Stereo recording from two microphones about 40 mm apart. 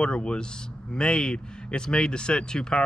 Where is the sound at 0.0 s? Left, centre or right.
Left.